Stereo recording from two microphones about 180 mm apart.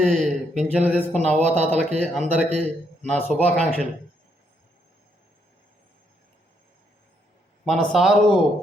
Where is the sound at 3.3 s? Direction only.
Centre (ahead or behind).